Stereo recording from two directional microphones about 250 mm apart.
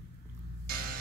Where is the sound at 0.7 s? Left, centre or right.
Right.